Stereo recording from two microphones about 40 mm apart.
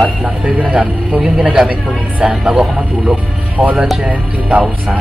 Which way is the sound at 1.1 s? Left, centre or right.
Centre.